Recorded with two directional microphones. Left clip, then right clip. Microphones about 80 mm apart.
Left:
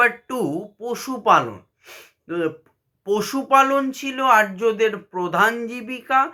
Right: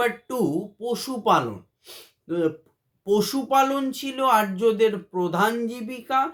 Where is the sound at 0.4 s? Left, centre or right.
Centre.